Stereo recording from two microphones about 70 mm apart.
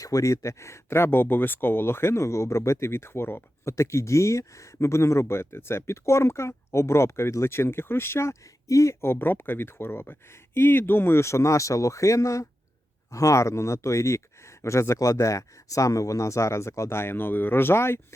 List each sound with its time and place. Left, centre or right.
0.0 s speech: left